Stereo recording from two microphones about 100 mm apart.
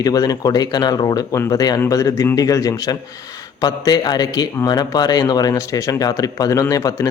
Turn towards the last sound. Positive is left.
turn(degrees=35)  # may be behind; listen again after turning